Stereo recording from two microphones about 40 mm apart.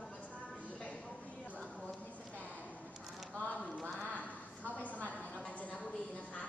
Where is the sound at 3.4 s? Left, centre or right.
Left.